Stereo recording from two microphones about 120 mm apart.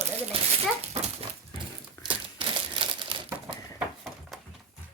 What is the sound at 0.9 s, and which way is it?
Dog, 65° right (ahead or behind).